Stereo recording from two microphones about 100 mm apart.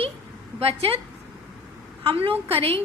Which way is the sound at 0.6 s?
75° right (ahead or behind).